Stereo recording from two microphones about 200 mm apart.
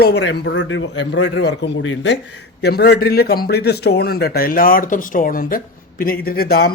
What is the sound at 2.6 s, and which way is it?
A man's voice, 55° left (ahead or behind).